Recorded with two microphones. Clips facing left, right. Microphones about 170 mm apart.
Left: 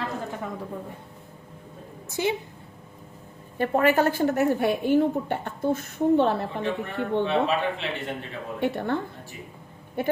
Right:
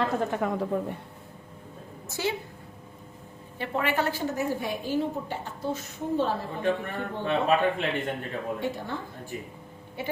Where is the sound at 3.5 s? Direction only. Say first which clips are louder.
Left 7 dB; 45° left (ahead or behind); by 6.4 s 65° left (ahead or behind).